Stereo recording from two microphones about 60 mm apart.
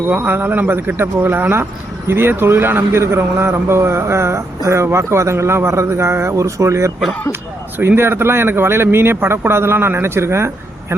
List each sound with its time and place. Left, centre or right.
0.1 s a man's voice: right
7.8 s speech: right